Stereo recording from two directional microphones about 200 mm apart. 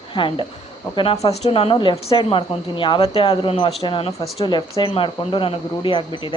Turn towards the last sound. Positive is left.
turn(degrees=25)  # may be behind; listen again after turning